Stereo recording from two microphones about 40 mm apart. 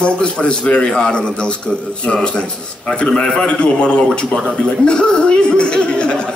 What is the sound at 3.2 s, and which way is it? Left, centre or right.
A man's voice, left.